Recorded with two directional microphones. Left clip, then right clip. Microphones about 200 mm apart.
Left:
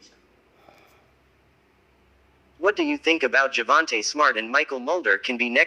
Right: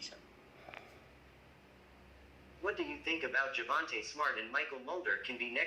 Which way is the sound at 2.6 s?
50° left (ahead or behind).